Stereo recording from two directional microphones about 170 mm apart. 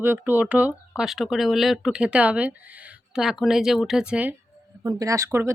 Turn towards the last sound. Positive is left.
turn(degrees=-15)  # may be behind; listen again after turning